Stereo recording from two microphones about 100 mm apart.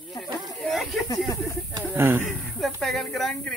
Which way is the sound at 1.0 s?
40° left (ahead or behind).